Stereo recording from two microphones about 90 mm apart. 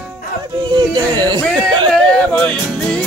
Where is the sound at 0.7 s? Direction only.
50° right (ahead or behind).